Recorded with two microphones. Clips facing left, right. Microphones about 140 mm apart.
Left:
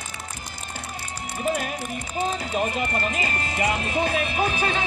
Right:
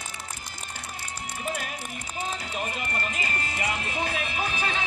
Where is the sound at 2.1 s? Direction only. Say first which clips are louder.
Left 8 dB; 85° left; by 3.6 s 70° left (ahead or behind).